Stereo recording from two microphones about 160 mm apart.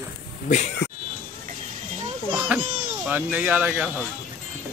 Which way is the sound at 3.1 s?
10° right (ahead or behind).